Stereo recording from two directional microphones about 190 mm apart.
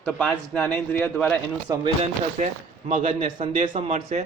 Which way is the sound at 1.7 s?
20° right (ahead or behind).